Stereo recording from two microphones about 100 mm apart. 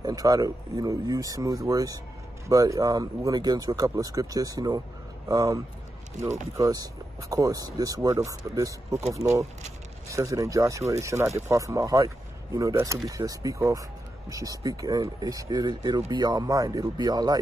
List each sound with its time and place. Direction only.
0.0 s speech: 40° right (ahead or behind)
6.2 s speech: 35° right (ahead or behind)